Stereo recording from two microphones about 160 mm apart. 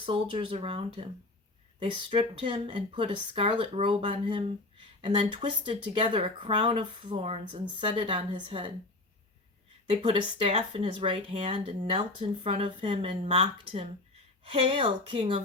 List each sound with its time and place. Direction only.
0.0 s speech: 30° right (ahead or behind)
9.9 s speech: 30° right (ahead or behind)